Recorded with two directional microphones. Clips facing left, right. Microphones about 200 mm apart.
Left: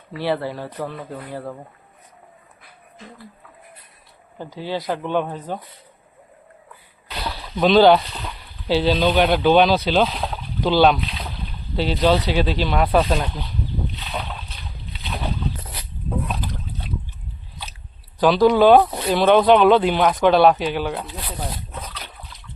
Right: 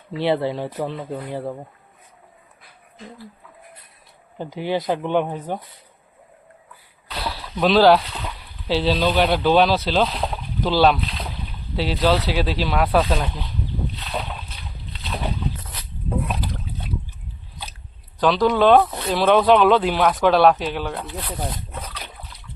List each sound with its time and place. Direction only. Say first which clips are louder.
0.2 s speech: right 3 dB; 20° right (ahead or behind)
4.4 s speech: right 3 dB; 20° right (ahead or behind)
7.1 s a sound: even; centre (ahead or behind)
8.6 s speech: left 2 dB; centre (ahead or behind)
13.9 s boat: right 1 dB; centre (ahead or behind)
16.0 s a sound: right 1 dB; 10° right (ahead or behind)
18.2 s speech: left 3 dB; 5° left (ahead or behind)